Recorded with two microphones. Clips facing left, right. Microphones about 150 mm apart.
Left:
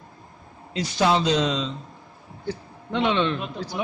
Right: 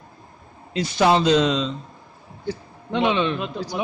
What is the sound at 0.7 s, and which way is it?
Speech, 60° right (ahead or behind).